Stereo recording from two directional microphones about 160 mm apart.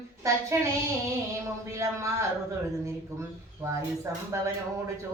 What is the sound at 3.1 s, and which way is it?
Speech, 15° right (ahead or behind).